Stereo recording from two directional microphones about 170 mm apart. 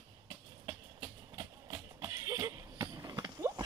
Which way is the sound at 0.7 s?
15° right (ahead or behind).